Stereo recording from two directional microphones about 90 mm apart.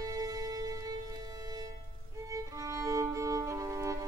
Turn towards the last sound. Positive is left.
turn(degrees=-35)  # may be behind; listen again after turning